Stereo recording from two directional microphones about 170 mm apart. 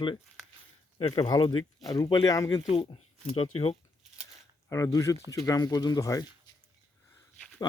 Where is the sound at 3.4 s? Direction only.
35° left (ahead or behind).